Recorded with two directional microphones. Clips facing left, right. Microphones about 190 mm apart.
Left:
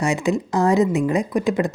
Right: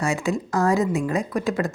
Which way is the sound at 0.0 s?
20° left (ahead or behind).